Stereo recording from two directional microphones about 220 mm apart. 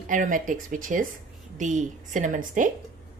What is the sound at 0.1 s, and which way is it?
A woman's voice, 35° right (ahead or behind).